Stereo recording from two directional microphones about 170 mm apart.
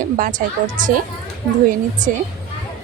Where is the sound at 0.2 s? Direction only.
50° right (ahead or behind).